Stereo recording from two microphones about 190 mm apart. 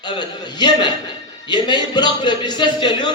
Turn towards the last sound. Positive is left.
turn(degrees=25)  # may be behind; listen again after turning